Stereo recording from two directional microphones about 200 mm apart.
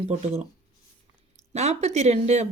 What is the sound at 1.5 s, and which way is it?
Speech, 35° right (ahead or behind).